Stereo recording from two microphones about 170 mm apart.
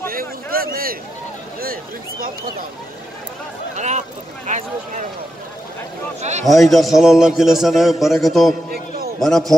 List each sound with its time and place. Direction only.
0.1 s a sound: 60° right (ahead or behind)
1.6 s speech: 60° right (ahead or behind)
3.7 s speech: 45° right (ahead or behind)
6.4 s a man's voice: centre (ahead or behind)
8.7 s a sound: 65° right (ahead or behind)
9.2 s a man's voice: centre (ahead or behind)